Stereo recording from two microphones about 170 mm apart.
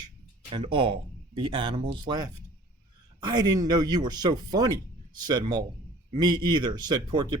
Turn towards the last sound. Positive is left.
turn(degrees=-25)  # may be behind; listen again after turning